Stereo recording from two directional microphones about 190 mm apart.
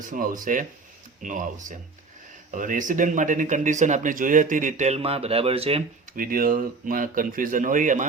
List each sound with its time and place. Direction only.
0.1 s speech: 45° right (ahead or behind); by 5.8 s 30° right (ahead or behind)
6.1 s speech: 50° right (ahead or behind)